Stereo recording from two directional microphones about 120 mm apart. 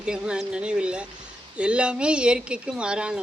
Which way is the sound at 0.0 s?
5° right (ahead or behind).